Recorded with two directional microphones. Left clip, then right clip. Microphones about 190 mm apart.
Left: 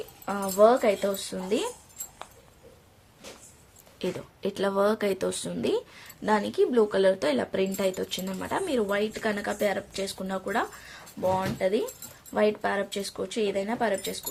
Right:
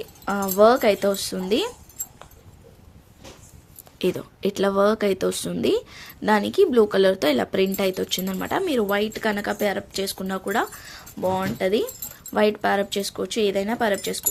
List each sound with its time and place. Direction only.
0.3 s speech: 45° right (ahead or behind)
3.9 s speech: 35° right (ahead or behind)